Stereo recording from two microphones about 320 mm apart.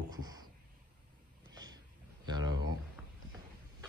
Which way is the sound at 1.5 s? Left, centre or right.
Centre.